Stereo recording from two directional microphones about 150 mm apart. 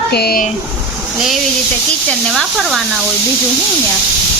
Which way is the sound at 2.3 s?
Centre (ahead or behind).